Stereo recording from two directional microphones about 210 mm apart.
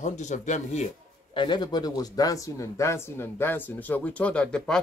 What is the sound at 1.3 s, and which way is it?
Speech, 20° left (ahead or behind).